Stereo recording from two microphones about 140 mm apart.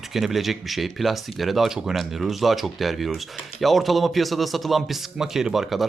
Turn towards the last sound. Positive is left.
turn(degrees=0)  # may be behind; listen again after turning